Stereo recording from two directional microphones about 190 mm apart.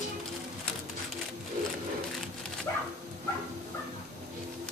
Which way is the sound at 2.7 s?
15° left (ahead or behind).